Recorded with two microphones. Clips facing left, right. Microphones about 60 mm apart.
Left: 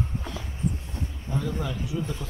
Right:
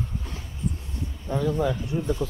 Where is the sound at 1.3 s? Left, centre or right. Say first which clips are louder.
Right 6 dB; right.